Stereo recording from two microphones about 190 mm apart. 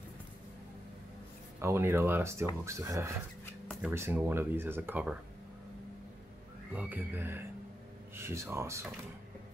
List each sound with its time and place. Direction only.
1.6 s speech: 15° right (ahead or behind)
6.7 s speech: 10° right (ahead or behind)